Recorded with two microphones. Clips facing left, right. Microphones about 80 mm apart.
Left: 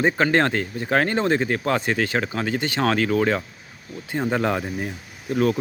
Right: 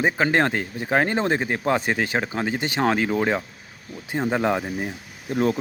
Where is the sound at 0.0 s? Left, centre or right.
Centre.